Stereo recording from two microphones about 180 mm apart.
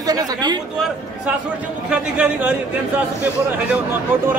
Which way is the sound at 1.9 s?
10° right (ahead or behind).